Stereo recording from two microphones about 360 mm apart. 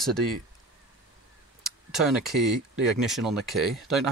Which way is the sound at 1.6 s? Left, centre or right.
Centre.